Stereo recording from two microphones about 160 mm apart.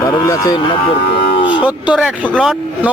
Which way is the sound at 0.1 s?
25° left (ahead or behind).